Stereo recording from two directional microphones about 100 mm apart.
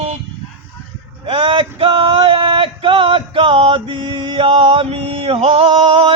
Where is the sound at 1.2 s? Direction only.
60° right (ahead or behind).